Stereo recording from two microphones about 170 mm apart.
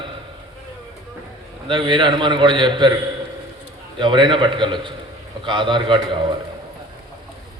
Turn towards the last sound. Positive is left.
turn(degrees=-30)  # may be behind; listen again after turning